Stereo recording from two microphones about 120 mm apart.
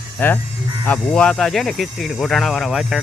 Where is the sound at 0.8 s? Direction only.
10° left (ahead or behind).